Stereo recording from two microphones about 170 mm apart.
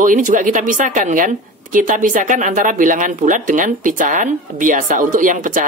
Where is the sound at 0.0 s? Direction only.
50° right (ahead or behind).